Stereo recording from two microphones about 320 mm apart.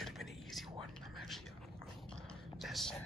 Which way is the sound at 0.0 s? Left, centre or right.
Centre.